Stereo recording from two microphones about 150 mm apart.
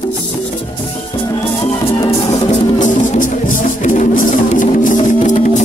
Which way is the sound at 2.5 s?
60° left (ahead or behind).